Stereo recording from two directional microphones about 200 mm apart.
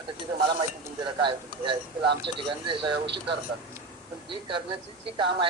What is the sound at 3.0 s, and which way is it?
Speech, 60° right (ahead or behind).